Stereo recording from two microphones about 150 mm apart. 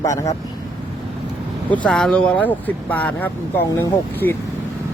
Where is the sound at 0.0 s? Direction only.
20° left (ahead or behind).